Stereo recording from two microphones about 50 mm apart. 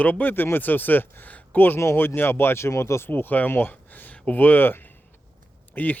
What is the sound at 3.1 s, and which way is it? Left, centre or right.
Speech, left.